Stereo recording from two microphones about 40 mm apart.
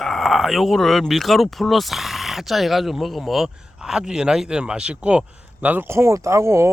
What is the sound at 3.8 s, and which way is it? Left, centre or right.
Speech, centre.